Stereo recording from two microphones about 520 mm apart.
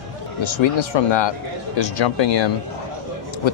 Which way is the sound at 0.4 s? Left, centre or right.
Left.